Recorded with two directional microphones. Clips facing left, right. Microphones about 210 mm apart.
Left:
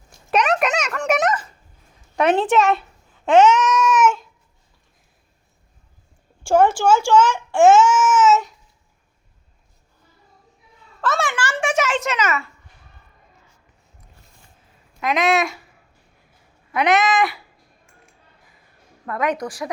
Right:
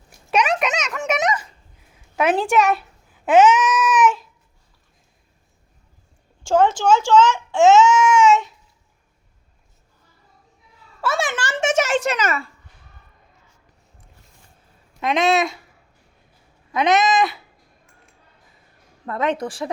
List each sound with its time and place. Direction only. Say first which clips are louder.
0.3 s a sound: left 1 dB; centre (ahead or behind)
2.1 s a child's voice: left 1 dB; 5° right (ahead or behind)
3.2 s babbling: even; 5° right (ahead or behind)
6.4 s speech: left 1 dB; 10° left (ahead or behind)
11.0 s a sound: left 1 dB; 10° right (ahead or behind)
11.9 s a child's voice: right 1 dB; 35° right (ahead or behind)
15.0 s cat: right 1 dB; 25° right (ahead or behind)
16.7 s cat: even; 20° right (ahead or behind)
19.0 s cat: right 1 dB; 25° right (ahead or behind)